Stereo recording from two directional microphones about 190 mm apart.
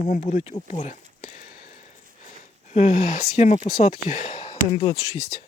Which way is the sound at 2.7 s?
40° left (ahead or behind).